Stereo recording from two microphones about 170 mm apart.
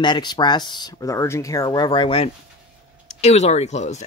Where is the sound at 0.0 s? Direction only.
25° left (ahead or behind).